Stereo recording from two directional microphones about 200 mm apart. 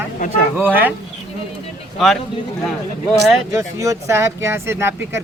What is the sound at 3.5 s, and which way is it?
Speech, 15° right (ahead or behind).